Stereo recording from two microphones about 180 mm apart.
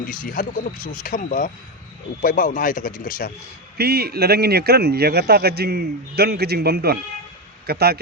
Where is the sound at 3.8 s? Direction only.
60° right (ahead or behind).